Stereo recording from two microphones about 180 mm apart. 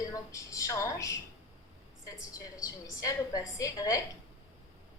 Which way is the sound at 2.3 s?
20° left (ahead or behind).